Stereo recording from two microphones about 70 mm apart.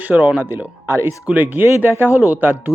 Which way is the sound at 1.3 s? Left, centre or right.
Right.